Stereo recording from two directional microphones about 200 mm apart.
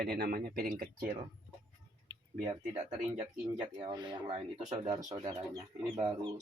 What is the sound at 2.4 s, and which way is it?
Speech, 30° right (ahead or behind).